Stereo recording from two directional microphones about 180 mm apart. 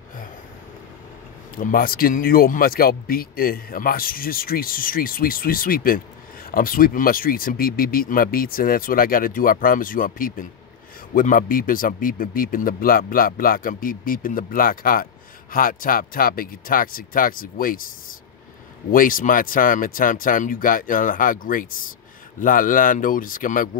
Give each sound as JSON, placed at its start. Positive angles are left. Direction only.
{"t": 1.6, "sound": "speech", "side_deg": 50}